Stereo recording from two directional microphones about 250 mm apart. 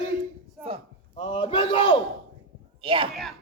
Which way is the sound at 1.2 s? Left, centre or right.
Centre.